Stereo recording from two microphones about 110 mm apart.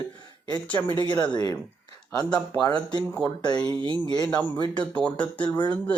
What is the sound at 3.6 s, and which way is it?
Speech, 45° right (ahead or behind).